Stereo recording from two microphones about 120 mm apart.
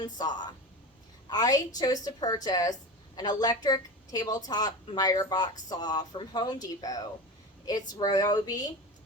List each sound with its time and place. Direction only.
0.0 s a woman's voice: 35° left (ahead or behind)